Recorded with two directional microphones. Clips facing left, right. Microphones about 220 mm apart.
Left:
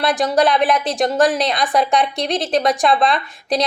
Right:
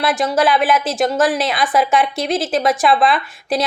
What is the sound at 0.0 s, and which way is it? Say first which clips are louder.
A woman's voice: left 1 dB; centre (ahead or behind).